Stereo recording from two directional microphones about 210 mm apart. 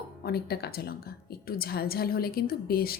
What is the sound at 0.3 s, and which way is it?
A woman's voice, 50° left (ahead or behind).